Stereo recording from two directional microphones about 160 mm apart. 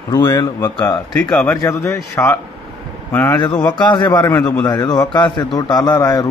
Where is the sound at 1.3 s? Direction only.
5° left (ahead or behind).